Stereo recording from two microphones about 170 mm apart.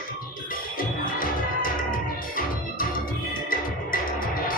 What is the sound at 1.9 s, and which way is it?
Music, 55° left (ahead or behind).